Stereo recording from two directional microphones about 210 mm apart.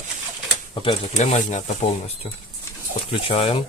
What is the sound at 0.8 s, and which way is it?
Speech, 35° left (ahead or behind).